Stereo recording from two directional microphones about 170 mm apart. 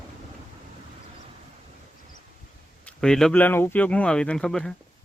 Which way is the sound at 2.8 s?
5° left (ahead or behind).